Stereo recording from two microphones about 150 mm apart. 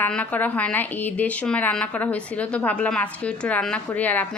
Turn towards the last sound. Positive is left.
turn(degrees=10)  # may be behind; listen again after turning